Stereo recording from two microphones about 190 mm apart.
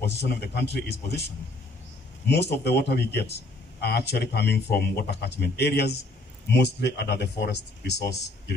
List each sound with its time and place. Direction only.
0.0 s speech: 60° left (ahead or behind)